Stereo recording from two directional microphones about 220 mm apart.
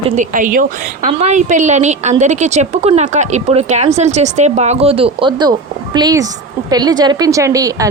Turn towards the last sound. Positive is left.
turn(degrees=-15)  # may be behind; listen again after turning